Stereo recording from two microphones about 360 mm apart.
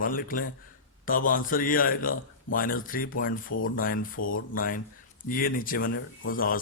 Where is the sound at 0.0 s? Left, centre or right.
Left.